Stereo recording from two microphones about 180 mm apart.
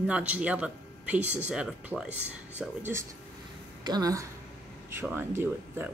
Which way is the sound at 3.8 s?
20° right (ahead or behind).